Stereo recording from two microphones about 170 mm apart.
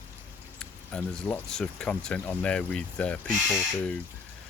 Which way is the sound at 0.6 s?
5° left (ahead or behind).